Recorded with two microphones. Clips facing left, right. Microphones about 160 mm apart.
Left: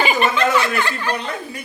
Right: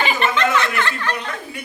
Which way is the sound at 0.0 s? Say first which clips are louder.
Left 2 dB; 10° left (ahead or behind).